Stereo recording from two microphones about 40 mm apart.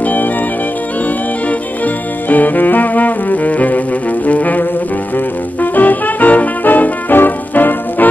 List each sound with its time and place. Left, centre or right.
0.0 s organ: left
2.2 s music: left